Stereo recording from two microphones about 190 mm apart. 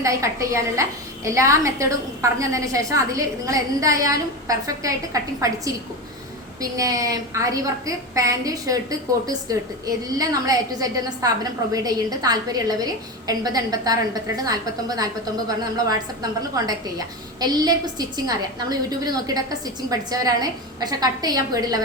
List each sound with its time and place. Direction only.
0.0 s a woman's voice: 15° right (ahead or behind)
17.4 s a woman's voice: 20° right (ahead or behind)